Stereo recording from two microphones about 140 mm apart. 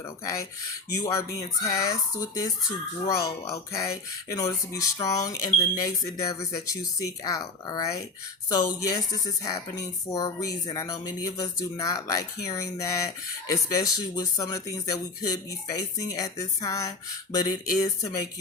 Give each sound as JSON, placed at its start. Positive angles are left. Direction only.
{"t": 0.3, "sound": "speech", "side_deg": 25}